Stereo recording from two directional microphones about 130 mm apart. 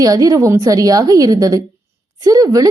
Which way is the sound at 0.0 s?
25° right (ahead or behind).